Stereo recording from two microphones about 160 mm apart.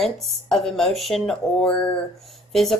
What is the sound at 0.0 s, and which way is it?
A woman's voice, centre (ahead or behind).